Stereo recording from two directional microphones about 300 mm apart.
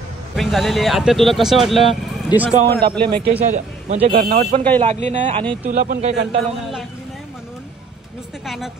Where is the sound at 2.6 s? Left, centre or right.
Right.